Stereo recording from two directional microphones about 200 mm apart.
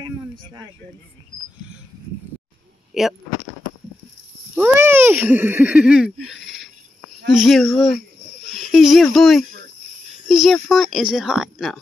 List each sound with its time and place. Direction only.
0.0 s a sound: 20° right (ahead or behind)
2.9 s speech: centre (ahead or behind)
4.6 s a woman's voice: 10° right (ahead or behind)